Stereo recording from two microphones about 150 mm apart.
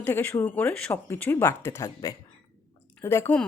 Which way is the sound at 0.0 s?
10° left (ahead or behind).